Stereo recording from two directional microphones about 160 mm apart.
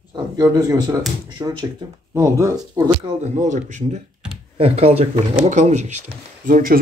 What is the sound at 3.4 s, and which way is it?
Speech, 50° right (ahead or behind).